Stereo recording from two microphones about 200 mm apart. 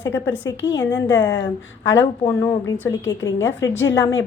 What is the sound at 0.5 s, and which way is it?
Speech, 70° left (ahead or behind).